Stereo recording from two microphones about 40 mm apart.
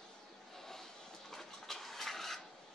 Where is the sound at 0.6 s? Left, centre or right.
Centre.